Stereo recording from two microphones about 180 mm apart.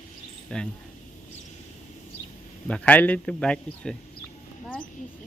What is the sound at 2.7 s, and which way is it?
A man's voice, 10° left (ahead or behind).